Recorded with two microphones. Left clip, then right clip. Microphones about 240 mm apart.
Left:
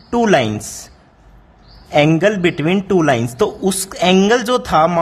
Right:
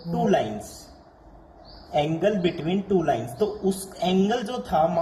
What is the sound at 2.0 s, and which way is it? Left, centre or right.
A man's voice, left.